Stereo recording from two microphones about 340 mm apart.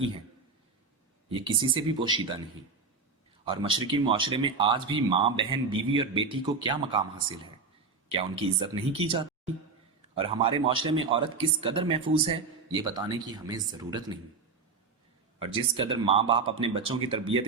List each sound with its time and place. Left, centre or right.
1.3 s speech: centre
3.4 s speech: centre
15.4 s speech: centre